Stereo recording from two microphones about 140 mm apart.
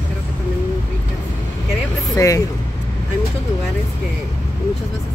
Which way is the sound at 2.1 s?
25° left (ahead or behind).